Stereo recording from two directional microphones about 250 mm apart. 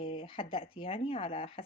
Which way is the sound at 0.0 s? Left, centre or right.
Left.